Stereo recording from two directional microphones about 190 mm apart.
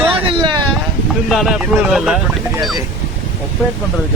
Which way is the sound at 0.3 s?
25° right (ahead or behind).